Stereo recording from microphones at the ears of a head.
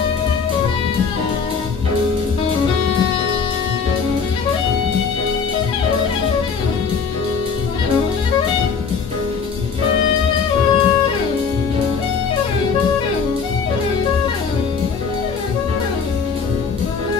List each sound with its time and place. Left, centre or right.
7.9 s music: left
9.8 s music: left
12.4 s music: left